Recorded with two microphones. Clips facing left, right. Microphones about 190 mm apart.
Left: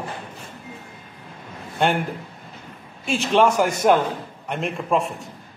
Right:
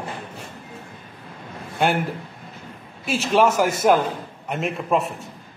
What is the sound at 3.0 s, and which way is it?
A man's voice, 5° right (ahead or behind).